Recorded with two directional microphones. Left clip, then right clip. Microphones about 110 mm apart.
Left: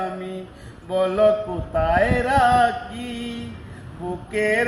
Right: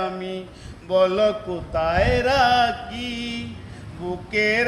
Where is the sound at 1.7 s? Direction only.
20° right (ahead or behind).